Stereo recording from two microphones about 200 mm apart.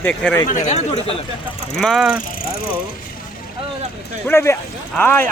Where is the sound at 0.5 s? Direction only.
35° left (ahead or behind).